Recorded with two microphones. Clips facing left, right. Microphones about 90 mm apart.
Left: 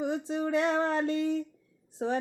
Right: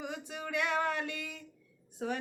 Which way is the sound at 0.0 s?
30° left (ahead or behind).